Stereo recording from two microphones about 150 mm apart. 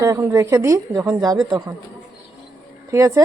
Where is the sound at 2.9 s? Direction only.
20° right (ahead or behind).